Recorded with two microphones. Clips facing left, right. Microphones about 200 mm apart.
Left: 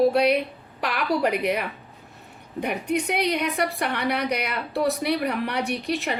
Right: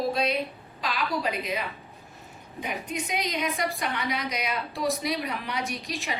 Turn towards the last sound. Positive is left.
turn(degrees=65)  # may be behind; listen again after turning